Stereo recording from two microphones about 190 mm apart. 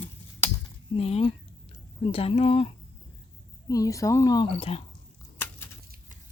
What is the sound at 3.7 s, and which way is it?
Speech, 15° left (ahead or behind).